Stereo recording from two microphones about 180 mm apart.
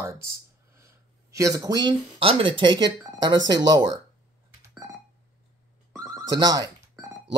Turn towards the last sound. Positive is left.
turn(degrees=-20)  # may be behind; listen again after turning